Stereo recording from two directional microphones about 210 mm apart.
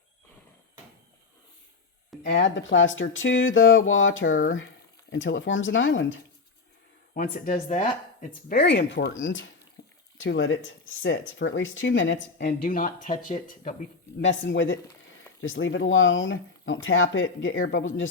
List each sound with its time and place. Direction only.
2.3 s speech: 60° left (ahead or behind)
7.3 s speech: 40° left (ahead or behind)
8.4 s speech: 50° left (ahead or behind)
9.8 s water: 50° left (ahead or behind)
10.2 s speech: 60° left (ahead or behind); by 13.7 s 40° left (ahead or behind)
14.2 s speech: 60° left (ahead or behind)